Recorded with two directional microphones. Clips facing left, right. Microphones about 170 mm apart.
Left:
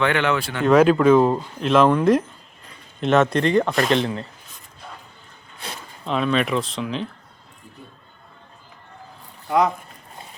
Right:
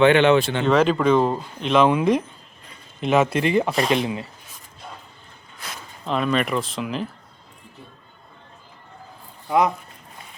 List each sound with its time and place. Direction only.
0.0 s speech: 25° right (ahead or behind)
0.6 s speech: 10° left (ahead or behind); by 4.3 s 10° right (ahead or behind)
6.1 s speech: centre (ahead or behind)